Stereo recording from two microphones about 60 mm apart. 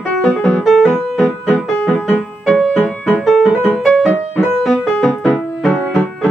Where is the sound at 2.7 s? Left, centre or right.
Left.